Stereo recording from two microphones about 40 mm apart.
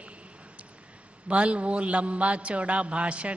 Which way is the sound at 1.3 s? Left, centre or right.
Right.